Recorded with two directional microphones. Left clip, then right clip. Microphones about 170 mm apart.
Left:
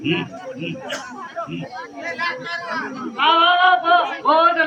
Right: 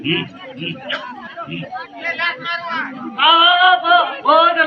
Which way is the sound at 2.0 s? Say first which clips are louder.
Right 4 dB; 35° left (ahead or behind).